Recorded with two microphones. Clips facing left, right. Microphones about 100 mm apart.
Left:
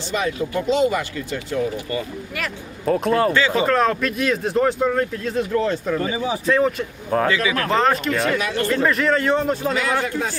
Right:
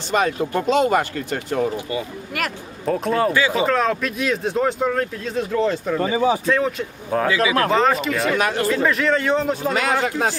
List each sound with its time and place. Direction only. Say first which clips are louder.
0.1 s speech: right 3 dB; 50° right (ahead or behind)
1.7 s speech: even; 20° right (ahead or behind)
2.8 s speech: left 1 dB; centre (ahead or behind)
3.3 s speech: even; 10° right (ahead or behind)
3.7 s speech: left 1 dB; centre (ahead or behind)
6.0 s speech: right 5 dB; 35° right (ahead or behind)
6.5 s speech: left 2 dB; centre (ahead or behind)
7.3 s speech: right 3 dB; 30° right (ahead or behind)
7.7 s speech: right 1 dB; centre (ahead or behind)
9.7 s speech: right 1 dB; 70° right (ahead or behind)